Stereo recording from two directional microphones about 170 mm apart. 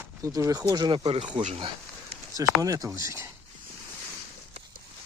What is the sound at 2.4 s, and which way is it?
Speech, 20° right (ahead or behind).